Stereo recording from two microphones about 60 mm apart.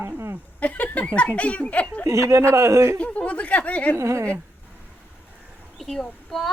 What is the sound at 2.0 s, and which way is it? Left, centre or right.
Speech, right.